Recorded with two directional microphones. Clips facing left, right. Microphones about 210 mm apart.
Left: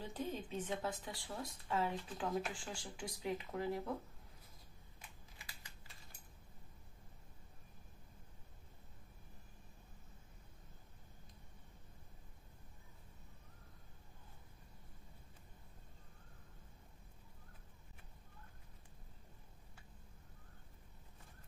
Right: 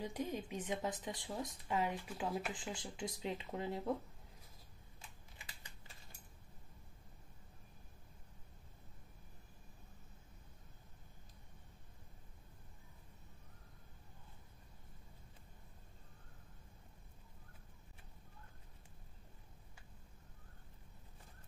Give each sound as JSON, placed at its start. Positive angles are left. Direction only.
{"t": 0.0, "sound": "a woman's voice", "side_deg": -10}